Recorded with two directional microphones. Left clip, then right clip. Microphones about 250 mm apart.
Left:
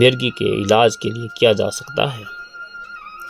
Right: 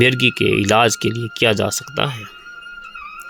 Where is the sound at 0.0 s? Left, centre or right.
Right.